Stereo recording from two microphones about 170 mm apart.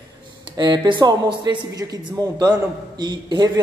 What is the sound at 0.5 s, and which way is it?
A man's voice, 25° right (ahead or behind).